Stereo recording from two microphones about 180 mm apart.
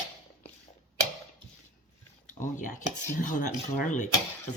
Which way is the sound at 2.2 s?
45° left (ahead or behind).